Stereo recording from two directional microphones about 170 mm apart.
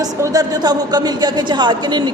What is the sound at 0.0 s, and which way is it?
A woman's voice, 20° right (ahead or behind).